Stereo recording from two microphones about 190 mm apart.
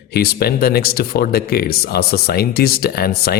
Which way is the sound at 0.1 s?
55° left (ahead or behind).